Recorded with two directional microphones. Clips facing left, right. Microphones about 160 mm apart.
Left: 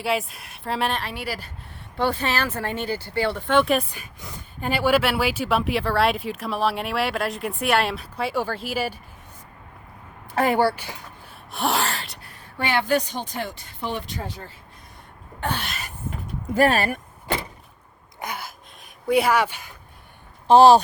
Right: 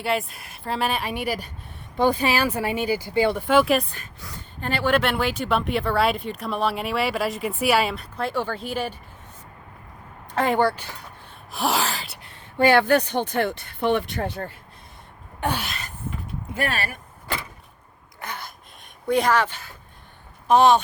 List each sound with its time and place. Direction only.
0.0 s speech: centre (ahead or behind)
1.0 s speech: 15° right (ahead or behind)
3.9 s speech: 10° left (ahead or behind)
10.3 s speech: 10° left (ahead or behind)
12.6 s speech: 55° right (ahead or behind)
15.4 s gasp: 15° right (ahead or behind)
15.6 s a sound: centre (ahead or behind)
16.6 s speech: 40° left (ahead or behind)
18.2 s speech: 10° left (ahead or behind)
20.5 s speech: 35° left (ahead or behind)